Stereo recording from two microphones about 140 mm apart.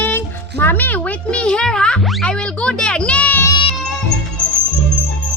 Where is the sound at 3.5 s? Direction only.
35° left (ahead or behind).